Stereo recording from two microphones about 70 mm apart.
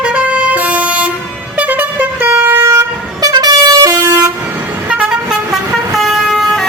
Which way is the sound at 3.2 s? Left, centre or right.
Right.